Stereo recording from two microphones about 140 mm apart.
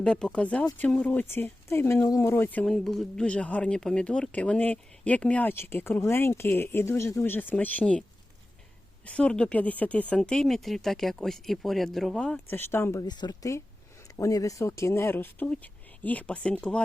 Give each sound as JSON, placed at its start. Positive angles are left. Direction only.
{"t": 0.0, "sound": "speech", "side_deg": 5}
{"t": 9.0, "sound": "speech", "side_deg": 5}
{"t": 12.5, "sound": "speech", "side_deg": 15}